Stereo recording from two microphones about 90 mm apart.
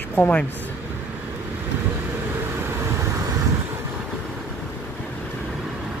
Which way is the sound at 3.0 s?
35° right (ahead or behind).